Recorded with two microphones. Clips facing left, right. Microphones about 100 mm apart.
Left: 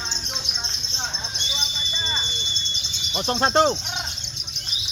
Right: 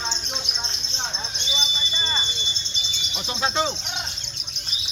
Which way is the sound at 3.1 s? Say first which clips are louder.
Left 6 dB; 55° left (ahead or behind).